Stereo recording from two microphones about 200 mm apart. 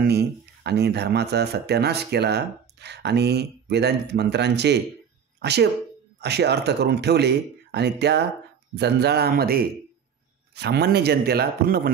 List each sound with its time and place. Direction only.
0.0 s a man's voice: 55° right (ahead or behind)